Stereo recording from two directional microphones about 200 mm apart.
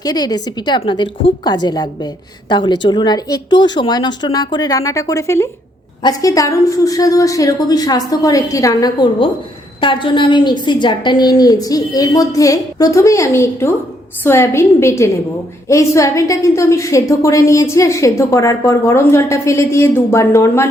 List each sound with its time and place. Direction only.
0.0 s a woman's voice: 20° left (ahead or behind)